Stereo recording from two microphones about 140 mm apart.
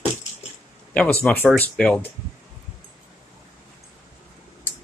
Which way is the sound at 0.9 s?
10° left (ahead or behind).